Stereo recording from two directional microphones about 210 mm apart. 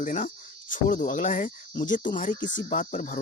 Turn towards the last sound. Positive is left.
turn(degrees=35)  # may be behind; listen again after turning